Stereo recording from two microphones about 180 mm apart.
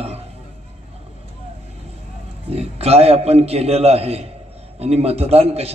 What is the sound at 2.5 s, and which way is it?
A man's voice, 35° right (ahead or behind).